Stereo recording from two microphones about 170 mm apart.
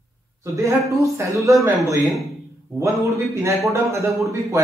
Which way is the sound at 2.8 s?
15° right (ahead or behind).